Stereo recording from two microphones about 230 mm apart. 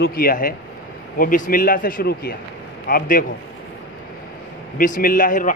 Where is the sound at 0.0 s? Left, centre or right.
Left.